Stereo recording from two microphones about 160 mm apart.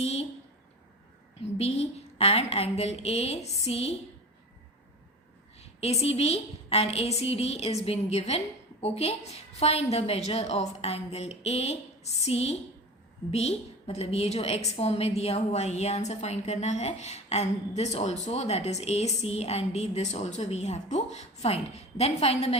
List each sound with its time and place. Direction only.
0.0 s a sound: 40° left (ahead or behind)
1.5 s a woman's voice: 40° left (ahead or behind)
5.5 s a woman's voice: 40° left (ahead or behind)